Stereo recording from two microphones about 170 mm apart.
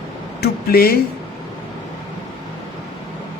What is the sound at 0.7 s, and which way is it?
Speech, 60° left (ahead or behind).